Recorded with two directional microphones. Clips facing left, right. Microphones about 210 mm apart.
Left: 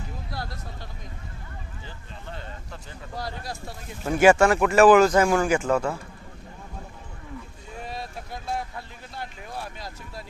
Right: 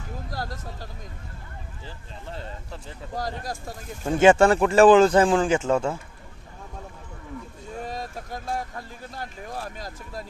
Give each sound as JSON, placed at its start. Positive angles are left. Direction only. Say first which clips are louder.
{"t": 0.3, "sound": "speech", "louder": "right 4 dB", "side_deg": -40}
{"t": 3.2, "sound": "speech", "louder": "right 3 dB", "side_deg": -45}
{"t": 4.1, "sound": "speech", "louder": "right 1 dB", "side_deg": -25}
{"t": 7.9, "sound": "speech", "louder": "left 1 dB", "side_deg": -40}